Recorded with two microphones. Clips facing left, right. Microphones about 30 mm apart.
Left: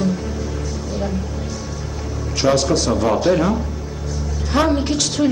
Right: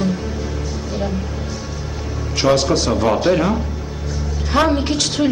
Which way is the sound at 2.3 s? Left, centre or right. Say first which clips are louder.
Right 1 dB; centre.